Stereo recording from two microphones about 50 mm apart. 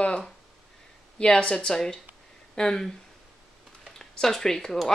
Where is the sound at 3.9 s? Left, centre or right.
Centre.